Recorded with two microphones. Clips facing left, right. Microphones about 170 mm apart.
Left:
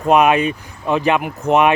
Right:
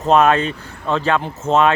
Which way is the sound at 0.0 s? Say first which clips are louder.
Left 1 dB; 15° left (ahead or behind).